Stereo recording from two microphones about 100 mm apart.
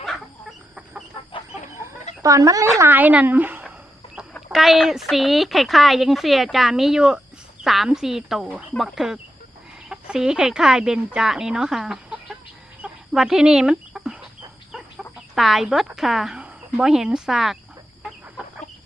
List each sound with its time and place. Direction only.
1.7 s chicken: 30° right (ahead or behind)
2.9 s speech: 15° right (ahead or behind)
4.5 s a woman's voice: centre (ahead or behind)
12.8 s chicken: 5° right (ahead or behind)
16.0 s a woman's voice: centre (ahead or behind)